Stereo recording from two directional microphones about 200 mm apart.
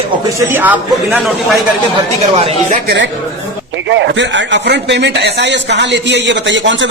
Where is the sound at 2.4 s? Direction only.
30° right (ahead or behind).